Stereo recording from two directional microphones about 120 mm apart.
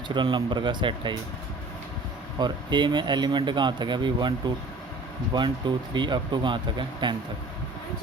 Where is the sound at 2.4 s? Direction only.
40° right (ahead or behind).